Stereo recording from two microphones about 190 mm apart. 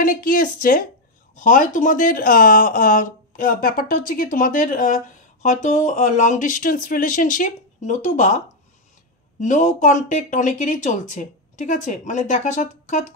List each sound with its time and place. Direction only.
0.0 s speech: 50° left (ahead or behind)
9.4 s speech: 40° left (ahead or behind)